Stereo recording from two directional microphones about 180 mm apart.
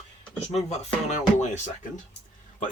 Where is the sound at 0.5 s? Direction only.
40° left (ahead or behind).